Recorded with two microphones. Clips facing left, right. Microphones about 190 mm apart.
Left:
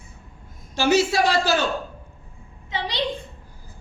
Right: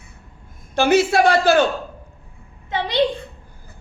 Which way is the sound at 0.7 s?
55° right (ahead or behind).